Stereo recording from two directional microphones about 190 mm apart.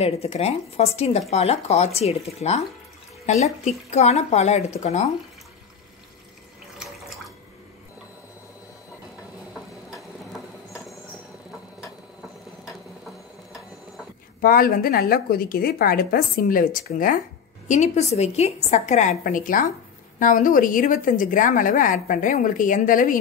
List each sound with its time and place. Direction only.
0.0 s a woman's voice: 35° left (ahead or behind)
6.8 s water: centre (ahead or behind)
14.4 s a woman's voice: 50° left (ahead or behind)
17.6 s a woman's voice: 35° left (ahead or behind)